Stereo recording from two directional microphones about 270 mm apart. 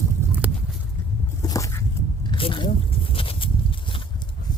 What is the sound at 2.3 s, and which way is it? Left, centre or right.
Biting, centre.